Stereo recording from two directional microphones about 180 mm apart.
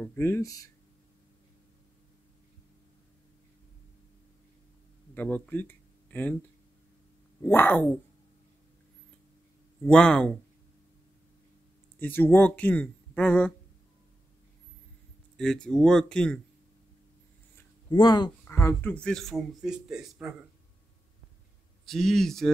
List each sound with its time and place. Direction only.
0.0 s speech: 10° left (ahead or behind)
5.1 s speech: 10° left (ahead or behind)
7.4 s speech: 10° left (ahead or behind)
9.8 s speech: 5° left (ahead or behind)
12.0 s speech: 10° left (ahead or behind)
15.3 s speech: 5° left (ahead or behind)
17.8 s speech: 25° left (ahead or behind)
18.4 s speech: 15° left (ahead or behind)
21.8 s speech: centre (ahead or behind)